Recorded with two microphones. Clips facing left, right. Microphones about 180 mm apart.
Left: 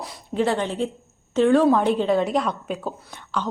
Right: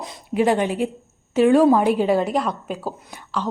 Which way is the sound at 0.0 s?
15° right (ahead or behind).